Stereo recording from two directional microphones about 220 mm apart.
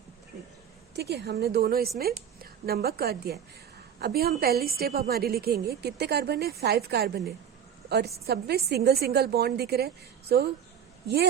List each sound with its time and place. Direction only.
0.9 s a woman's voice: 50° right (ahead or behind)